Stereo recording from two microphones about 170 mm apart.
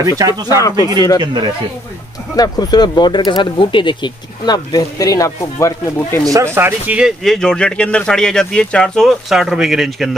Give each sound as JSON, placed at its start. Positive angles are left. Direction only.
{"t": 0.0, "sound": "speech", "side_deg": -20}
{"t": 0.6, "sound": "speech", "side_deg": 20}
{"t": 1.2, "sound": "speech", "side_deg": -25}
{"t": 2.3, "sound": "speech", "side_deg": 25}
{"t": 6.3, "sound": "speech", "side_deg": -15}